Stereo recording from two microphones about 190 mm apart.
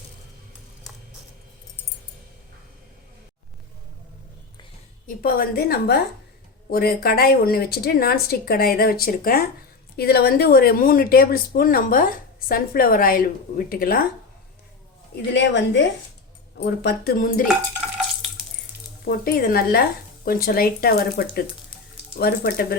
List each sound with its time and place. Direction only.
0.9 s a sound: centre (ahead or behind)
5.0 s speech: 50° left (ahead or behind)
15.1 s a woman's voice: 65° left (ahead or behind)
16.6 s speech: 55° left (ahead or behind)
19.0 s speech: 50° left (ahead or behind)